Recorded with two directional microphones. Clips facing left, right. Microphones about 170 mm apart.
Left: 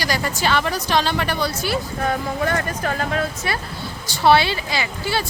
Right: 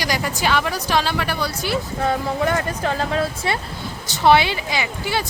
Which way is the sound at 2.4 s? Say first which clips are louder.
Right 1 dB; 20° right (ahead or behind).